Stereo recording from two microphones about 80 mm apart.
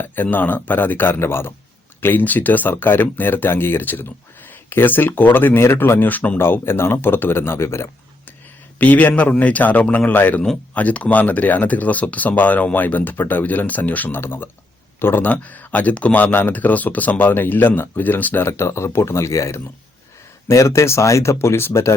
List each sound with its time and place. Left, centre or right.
0.0 s speech: left
8.8 s speech: left